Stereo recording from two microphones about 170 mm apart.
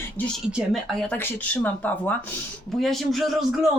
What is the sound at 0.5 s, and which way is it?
A man's voice, centre (ahead or behind).